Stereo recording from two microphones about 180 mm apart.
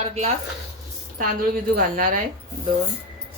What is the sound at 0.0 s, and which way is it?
Speech, 35° right (ahead or behind).